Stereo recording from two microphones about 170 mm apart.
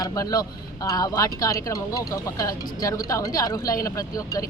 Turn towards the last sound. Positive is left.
turn(degrees=20)  # may be behind; listen again after turning